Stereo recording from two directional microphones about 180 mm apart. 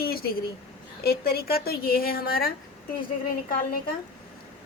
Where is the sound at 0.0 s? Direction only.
55° left (ahead or behind).